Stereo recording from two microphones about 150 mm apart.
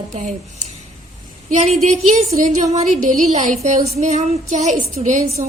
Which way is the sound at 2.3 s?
55° right (ahead or behind).